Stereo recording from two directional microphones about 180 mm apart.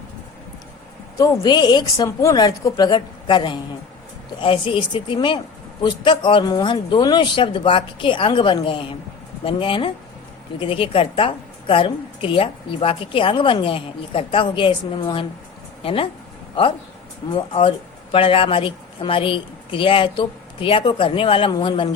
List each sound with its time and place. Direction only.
1.2 s a woman's voice: 15° left (ahead or behind)